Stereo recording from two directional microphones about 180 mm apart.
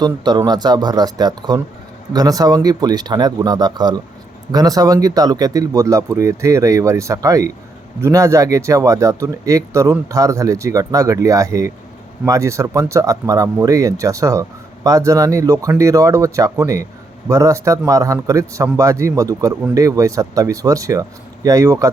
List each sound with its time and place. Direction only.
0.0 s speech: 25° right (ahead or behind)